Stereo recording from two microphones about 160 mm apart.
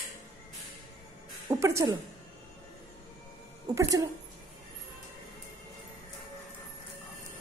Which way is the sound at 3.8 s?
20° right (ahead or behind).